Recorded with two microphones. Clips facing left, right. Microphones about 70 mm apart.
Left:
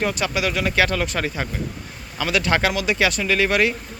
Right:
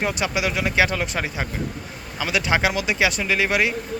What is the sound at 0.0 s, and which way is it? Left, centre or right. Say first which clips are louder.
Speech: left 1 dB; right.